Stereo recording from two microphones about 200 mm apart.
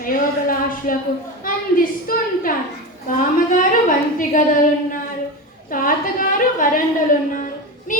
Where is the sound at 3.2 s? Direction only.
40° left (ahead or behind).